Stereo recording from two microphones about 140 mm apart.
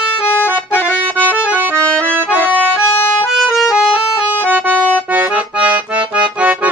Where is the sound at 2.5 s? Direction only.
5° right (ahead or behind).